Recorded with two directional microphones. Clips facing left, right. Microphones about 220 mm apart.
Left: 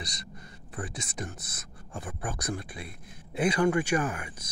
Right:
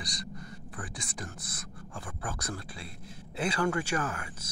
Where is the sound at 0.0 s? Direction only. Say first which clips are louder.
Right 2 dB; 25° left (ahead or behind).